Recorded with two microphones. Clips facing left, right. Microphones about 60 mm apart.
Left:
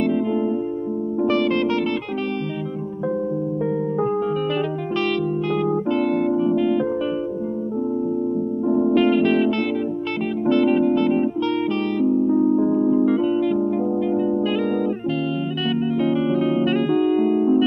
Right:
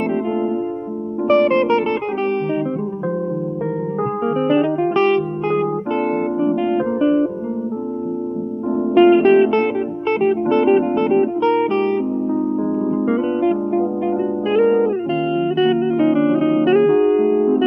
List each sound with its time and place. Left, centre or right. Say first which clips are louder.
1.2 s music: right 6 dB; right
4.5 s music: right 7 dB; right
8.6 s music: left 1 dB; centre
8.9 s music: right 10 dB; right